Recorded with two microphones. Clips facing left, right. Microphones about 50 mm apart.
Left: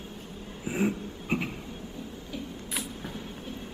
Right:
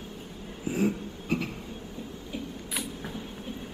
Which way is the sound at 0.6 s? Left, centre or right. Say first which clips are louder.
Right 1 dB; left.